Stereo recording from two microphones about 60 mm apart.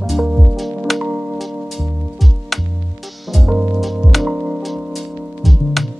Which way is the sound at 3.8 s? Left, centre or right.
Centre.